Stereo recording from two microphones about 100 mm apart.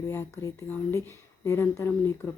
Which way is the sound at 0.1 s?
25° left (ahead or behind).